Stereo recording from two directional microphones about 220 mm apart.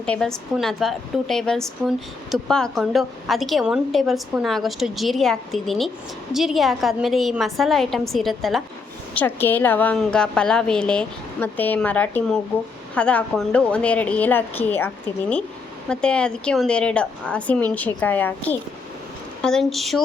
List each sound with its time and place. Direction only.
0.0 s a woman's voice: 5° left (ahead or behind)